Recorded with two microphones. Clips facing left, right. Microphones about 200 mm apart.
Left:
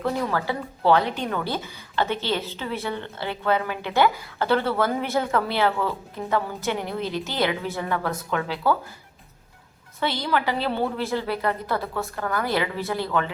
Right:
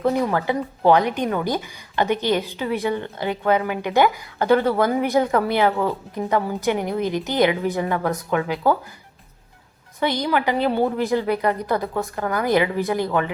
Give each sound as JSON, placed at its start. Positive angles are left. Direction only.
{"t": 0.0, "sound": "a woman's voice", "side_deg": -20}
{"t": 10.0, "sound": "a woman's voice", "side_deg": -15}